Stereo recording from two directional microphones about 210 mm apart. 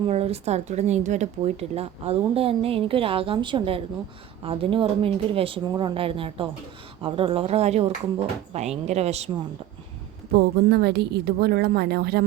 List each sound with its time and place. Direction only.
0.0 s a woman's voice: 30° right (ahead or behind)
10.3 s a woman's voice: 50° right (ahead or behind)